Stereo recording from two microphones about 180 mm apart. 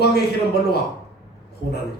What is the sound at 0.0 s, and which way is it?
Speech, 65° left (ahead or behind).